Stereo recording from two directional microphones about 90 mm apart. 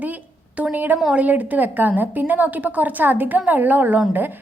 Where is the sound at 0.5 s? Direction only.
15° right (ahead or behind).